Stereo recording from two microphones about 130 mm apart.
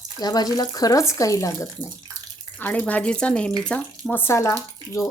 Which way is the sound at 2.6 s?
10° left (ahead or behind).